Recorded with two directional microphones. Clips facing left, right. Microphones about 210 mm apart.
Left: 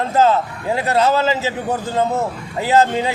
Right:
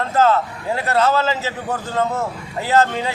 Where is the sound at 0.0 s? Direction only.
15° left (ahead or behind).